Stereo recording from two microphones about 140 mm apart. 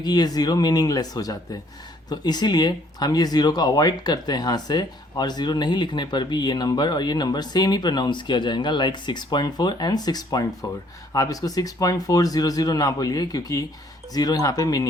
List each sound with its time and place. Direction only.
0.0 s speech: 30° left (ahead or behind)